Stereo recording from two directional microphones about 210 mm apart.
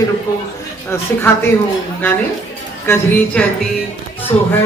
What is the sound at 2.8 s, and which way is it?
Music, 10° left (ahead or behind).